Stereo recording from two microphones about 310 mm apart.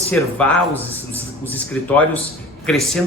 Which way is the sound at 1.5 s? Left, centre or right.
Centre.